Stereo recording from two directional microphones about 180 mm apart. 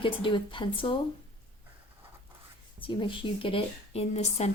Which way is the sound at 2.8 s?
25° left (ahead or behind).